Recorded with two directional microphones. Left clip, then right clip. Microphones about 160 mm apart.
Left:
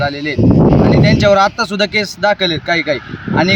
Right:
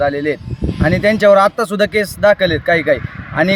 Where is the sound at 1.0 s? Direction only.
20° right (ahead or behind).